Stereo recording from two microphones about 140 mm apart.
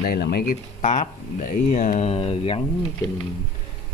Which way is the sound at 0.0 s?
90° left.